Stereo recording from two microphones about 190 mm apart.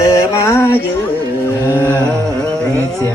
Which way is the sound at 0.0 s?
15° left (ahead or behind).